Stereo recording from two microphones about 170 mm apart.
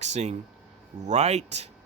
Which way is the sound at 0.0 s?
40° right (ahead or behind).